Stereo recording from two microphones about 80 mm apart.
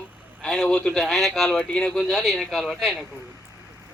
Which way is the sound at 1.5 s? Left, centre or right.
Centre.